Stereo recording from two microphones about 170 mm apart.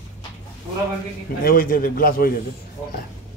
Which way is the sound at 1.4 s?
55° left (ahead or behind).